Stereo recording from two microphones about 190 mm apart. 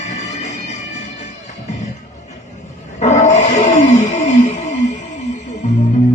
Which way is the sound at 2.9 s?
35° left (ahead or behind).